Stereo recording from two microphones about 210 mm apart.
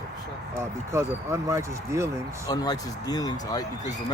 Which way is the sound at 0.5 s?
15° right (ahead or behind).